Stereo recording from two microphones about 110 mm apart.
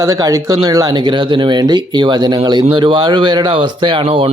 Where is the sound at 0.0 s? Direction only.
35° right (ahead or behind).